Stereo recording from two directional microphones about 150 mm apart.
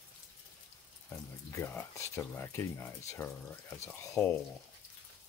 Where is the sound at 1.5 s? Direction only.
20° left (ahead or behind).